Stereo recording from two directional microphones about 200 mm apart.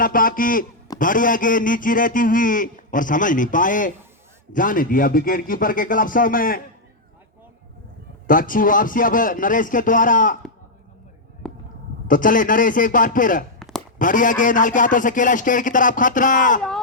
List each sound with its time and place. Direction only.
0.0 s a man's voice: 45° left (ahead or behind)
8.3 s a man's voice: 45° left (ahead or behind)
11.4 s a sound: 5° left (ahead or behind)
12.0 s a man's voice: 40° left (ahead or behind)
13.6 s a sound: centre (ahead or behind)
14.0 s speech: 40° left (ahead or behind)